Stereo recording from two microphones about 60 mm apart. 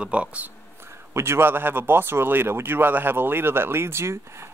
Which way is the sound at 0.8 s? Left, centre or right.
Right.